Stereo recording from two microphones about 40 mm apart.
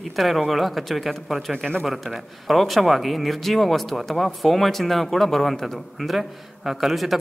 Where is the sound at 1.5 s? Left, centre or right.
Centre.